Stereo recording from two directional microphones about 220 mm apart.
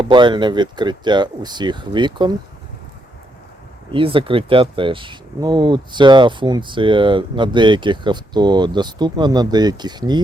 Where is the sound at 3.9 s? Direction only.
25° right (ahead or behind).